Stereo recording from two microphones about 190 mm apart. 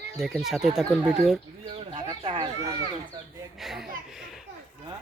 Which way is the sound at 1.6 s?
25° right (ahead or behind).